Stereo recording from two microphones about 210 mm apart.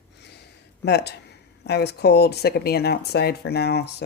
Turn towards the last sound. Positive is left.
turn(degrees=50)  # may be behind; listen again after turning